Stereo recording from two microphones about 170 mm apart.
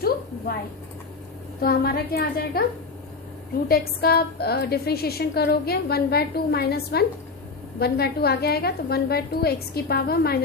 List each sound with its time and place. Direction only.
1.6 s a woman's voice: 65° left (ahead or behind)
3.7 s a woman's voice: 65° left (ahead or behind)